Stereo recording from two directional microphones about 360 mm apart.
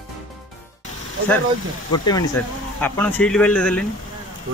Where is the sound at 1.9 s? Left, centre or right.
Centre.